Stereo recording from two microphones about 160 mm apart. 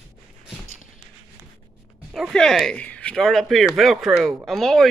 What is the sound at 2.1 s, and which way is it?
Speech, centre (ahead or behind).